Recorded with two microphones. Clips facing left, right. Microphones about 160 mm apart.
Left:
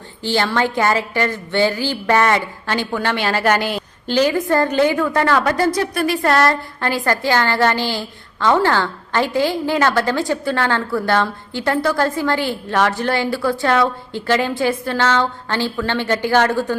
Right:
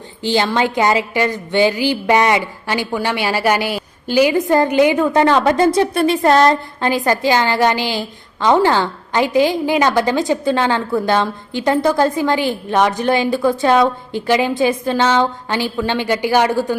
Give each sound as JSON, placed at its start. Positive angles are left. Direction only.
{"t": 0.2, "sound": "a woman's voice", "side_deg": -15}